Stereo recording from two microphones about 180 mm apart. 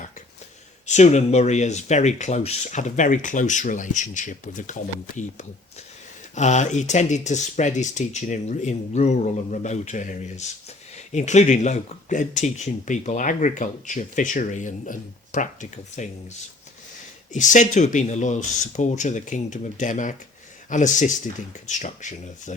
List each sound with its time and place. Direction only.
0.9 s speech: 40° left (ahead or behind)
17.3 s speech: 45° left (ahead or behind)